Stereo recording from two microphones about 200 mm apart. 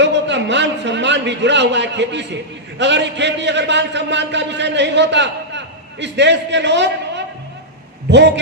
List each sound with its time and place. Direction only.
0.0 s a man's voice: 60° right (ahead or behind)